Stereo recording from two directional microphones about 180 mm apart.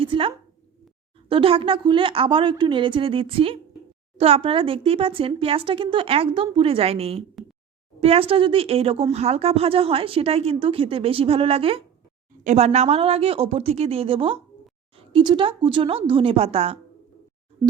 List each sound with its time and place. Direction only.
0.0 s a woman's voice: 30° right (ahead or behind)